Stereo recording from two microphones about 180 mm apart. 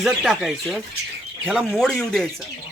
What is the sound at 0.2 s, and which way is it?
Speech, centre (ahead or behind).